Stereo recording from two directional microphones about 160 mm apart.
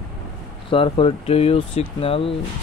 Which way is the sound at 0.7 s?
35° left (ahead or behind).